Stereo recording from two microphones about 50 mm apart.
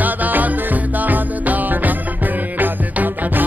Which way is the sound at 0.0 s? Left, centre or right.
Right.